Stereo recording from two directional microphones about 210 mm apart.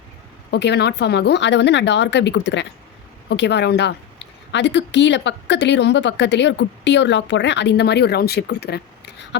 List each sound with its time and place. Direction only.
0.5 s speech: 55° left (ahead or behind)